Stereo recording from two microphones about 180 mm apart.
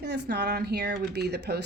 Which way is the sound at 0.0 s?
65° right (ahead or behind).